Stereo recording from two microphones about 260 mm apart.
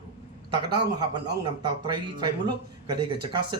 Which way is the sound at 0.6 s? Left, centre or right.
Centre.